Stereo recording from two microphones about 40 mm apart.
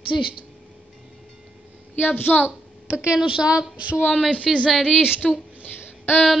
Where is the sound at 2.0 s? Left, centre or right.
Left.